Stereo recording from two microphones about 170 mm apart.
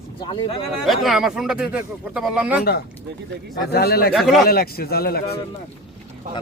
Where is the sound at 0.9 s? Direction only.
Centre (ahead or behind).